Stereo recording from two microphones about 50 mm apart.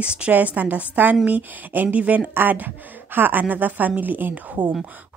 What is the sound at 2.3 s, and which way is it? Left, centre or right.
A woman's voice, right.